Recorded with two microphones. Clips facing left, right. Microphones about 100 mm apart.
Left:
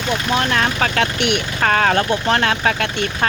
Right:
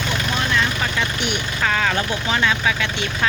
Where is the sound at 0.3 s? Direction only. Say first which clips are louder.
Left 4 dB; 60° left (ahead or behind).